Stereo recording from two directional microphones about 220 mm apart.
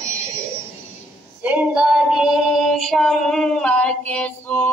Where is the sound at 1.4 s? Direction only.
5° right (ahead or behind).